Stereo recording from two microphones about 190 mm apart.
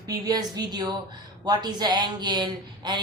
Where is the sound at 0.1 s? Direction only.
20° right (ahead or behind).